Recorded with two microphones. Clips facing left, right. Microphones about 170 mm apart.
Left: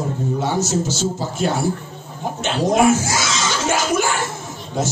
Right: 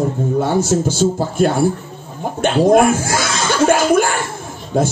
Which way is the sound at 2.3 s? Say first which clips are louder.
Right 6 dB; 55° right (ahead or behind).